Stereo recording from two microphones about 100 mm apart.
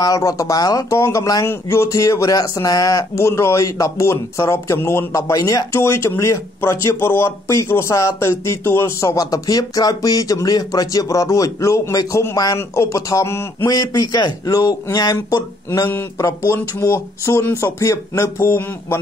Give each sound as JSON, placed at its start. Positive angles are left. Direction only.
{"t": 0.0, "sound": "a man's voice", "side_deg": 35}
{"t": 13.7, "sound": "a man's voice", "side_deg": 40}